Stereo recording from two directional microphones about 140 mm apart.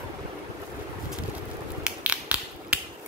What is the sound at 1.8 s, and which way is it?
Finger snapping, 10° right (ahead or behind).